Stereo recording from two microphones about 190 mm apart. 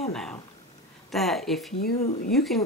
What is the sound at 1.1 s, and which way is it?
A woman's voice, centre (ahead or behind).